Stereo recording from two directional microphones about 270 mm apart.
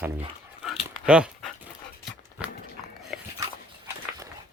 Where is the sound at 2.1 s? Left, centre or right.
Centre.